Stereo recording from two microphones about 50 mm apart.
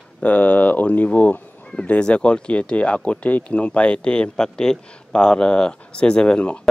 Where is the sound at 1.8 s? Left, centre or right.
Left.